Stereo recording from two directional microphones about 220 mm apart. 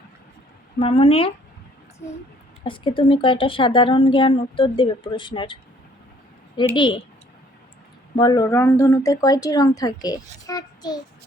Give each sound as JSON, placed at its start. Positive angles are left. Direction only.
{"t": 0.8, "sound": "a woman's voice", "side_deg": 25}
{"t": 2.6, "sound": "a woman's voice", "side_deg": 20}
{"t": 6.7, "sound": "a woman's voice", "side_deg": 20}
{"t": 8.2, "sound": "speech", "side_deg": 20}
{"t": 10.4, "sound": "a sound", "side_deg": 15}